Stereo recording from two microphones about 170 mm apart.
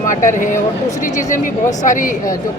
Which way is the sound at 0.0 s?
50° left (ahead or behind).